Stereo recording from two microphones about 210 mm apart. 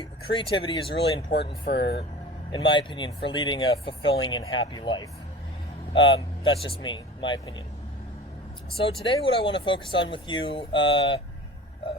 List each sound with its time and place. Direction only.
0.0 s speech: 25° left (ahead or behind)
1.3 s speech: 50° left (ahead or behind)
2.5 s speech: 25° left (ahead or behind)
8.7 s speech: 25° left (ahead or behind)